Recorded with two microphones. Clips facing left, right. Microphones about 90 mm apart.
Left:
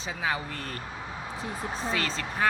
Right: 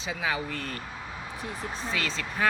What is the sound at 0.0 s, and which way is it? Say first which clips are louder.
Speech: even; 35° left (ahead or behind).